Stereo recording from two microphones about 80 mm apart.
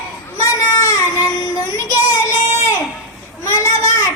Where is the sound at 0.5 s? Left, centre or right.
Left.